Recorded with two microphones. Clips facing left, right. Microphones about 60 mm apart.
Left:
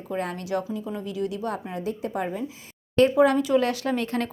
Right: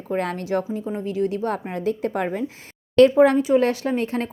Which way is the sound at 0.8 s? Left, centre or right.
Right.